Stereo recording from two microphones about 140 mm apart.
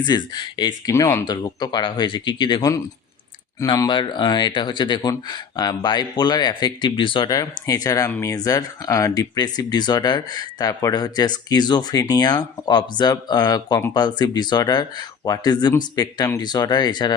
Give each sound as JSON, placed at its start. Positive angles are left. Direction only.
{"t": 0.0, "sound": "speech", "side_deg": 30}